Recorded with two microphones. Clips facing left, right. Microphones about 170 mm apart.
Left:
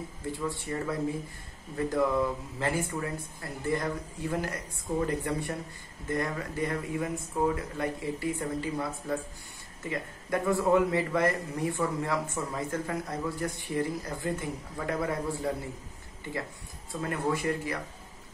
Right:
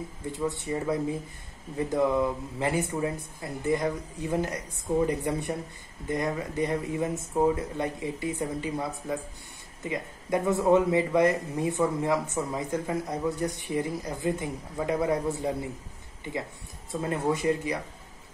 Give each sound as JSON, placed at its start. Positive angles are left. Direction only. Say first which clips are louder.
{"t": 0.3, "sound": "speech", "louder": "right 3 dB", "side_deg": -20}
{"t": 17.0, "sound": "speech", "louder": "right 3 dB", "side_deg": -20}